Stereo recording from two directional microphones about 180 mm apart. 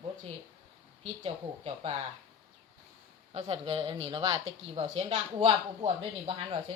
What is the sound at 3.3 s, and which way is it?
Speech, 30° right (ahead or behind).